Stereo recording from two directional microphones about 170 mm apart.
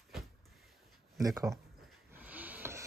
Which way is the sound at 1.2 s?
20° right (ahead or behind).